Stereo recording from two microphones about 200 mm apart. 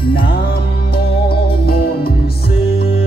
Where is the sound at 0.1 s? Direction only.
50° left (ahead or behind).